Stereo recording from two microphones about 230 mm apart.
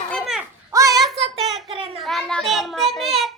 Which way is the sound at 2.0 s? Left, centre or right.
Centre.